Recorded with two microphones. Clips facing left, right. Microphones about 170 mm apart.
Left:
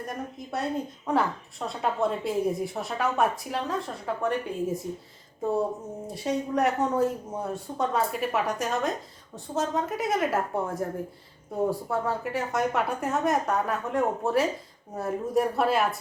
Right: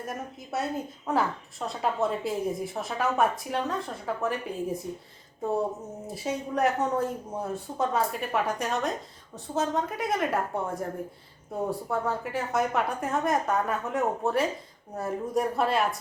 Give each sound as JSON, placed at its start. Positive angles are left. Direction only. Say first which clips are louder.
{"t": 0.0, "sound": "a woman's voice", "louder": "left 1 dB", "side_deg": -5}
{"t": 6.1, "sound": "a woman's voice", "louder": "left 3 dB", "side_deg": 0}